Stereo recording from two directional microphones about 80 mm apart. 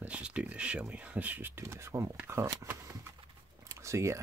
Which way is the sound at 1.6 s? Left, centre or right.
Right.